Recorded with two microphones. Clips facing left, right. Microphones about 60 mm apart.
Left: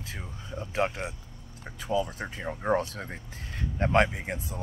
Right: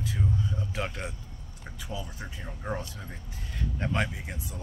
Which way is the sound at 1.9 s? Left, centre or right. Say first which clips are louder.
Left 11 dB; left.